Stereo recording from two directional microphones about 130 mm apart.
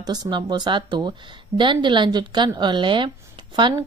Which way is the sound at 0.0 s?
30° right (ahead or behind).